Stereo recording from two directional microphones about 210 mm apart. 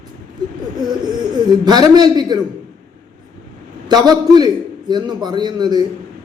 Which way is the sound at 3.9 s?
20° right (ahead or behind).